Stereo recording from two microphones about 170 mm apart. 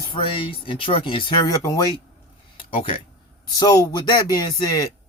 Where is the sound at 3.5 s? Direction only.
20° left (ahead or behind).